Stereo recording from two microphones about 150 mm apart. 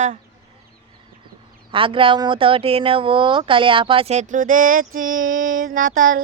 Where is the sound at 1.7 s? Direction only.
35° right (ahead or behind).